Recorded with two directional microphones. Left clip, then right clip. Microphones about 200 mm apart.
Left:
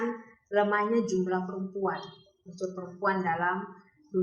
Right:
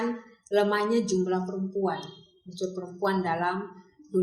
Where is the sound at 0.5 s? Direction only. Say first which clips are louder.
Right 1 dB; 35° right (ahead or behind).